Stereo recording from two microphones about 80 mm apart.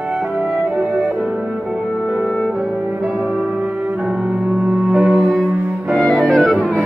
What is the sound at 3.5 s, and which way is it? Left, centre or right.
Cello, centre.